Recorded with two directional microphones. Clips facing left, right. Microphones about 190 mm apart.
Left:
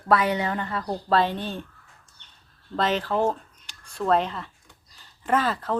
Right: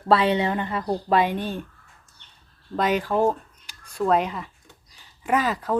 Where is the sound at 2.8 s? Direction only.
10° right (ahead or behind).